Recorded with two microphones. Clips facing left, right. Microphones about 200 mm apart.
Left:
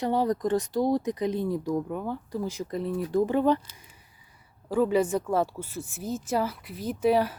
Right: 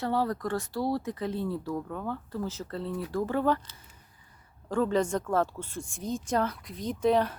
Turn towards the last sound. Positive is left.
turn(degrees=10)  # may be behind; listen again after turning